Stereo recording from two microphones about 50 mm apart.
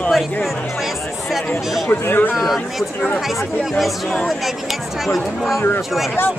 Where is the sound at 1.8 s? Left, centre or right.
Left.